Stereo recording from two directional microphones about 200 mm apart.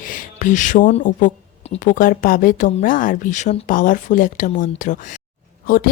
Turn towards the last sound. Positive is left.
turn(degrees=45)  # may be behind; listen again after turning